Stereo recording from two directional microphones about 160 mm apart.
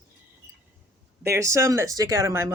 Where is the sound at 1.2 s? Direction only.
15° right (ahead or behind).